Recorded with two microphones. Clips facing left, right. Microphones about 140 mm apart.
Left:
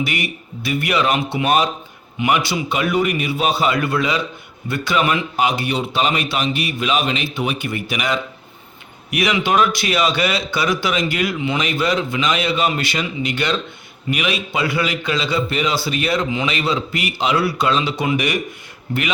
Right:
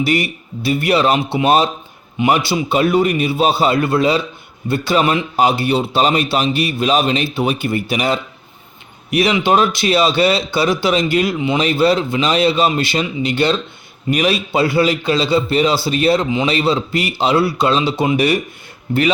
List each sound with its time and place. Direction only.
0.0 s a man's voice: 35° right (ahead or behind)